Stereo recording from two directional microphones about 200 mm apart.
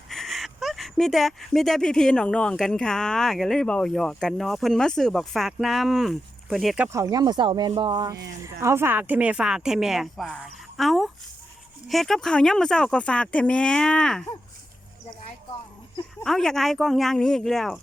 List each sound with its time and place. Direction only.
0.1 s speech: centre (ahead or behind); by 7.7 s 20° right (ahead or behind)
7.7 s rub: 20° right (ahead or behind)
8.6 s speech: 10° right (ahead or behind)
16.2 s speech: centre (ahead or behind)